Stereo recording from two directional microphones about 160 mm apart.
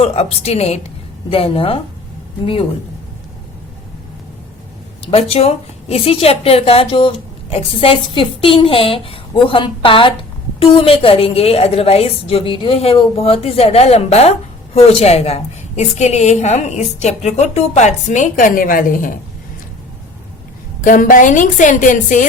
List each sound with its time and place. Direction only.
0.0 s a woman's voice: 40° left (ahead or behind)
5.1 s a woman's voice: 40° left (ahead or behind); by 19.1 s 55° left (ahead or behind)
20.8 s a woman's voice: 55° left (ahead or behind)